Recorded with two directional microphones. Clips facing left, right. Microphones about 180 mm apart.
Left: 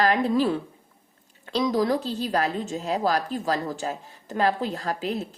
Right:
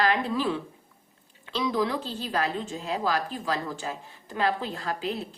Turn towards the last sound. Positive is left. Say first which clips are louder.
# left 3 dB
turn(degrees=40)  # may be behind; listen again after turning